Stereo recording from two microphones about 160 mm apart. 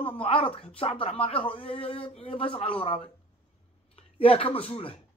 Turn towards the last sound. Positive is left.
turn(degrees=35)  # may be behind; listen again after turning